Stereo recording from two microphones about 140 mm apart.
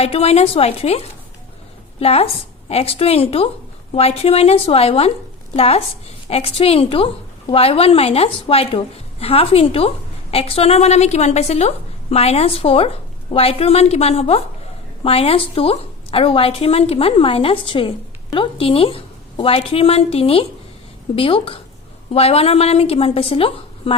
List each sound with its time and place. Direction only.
0.0 s a woman's voice: 45° left (ahead or behind)